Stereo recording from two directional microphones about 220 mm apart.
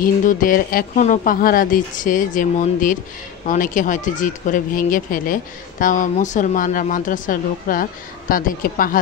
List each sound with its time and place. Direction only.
0.0 s speech: 40° left (ahead or behind)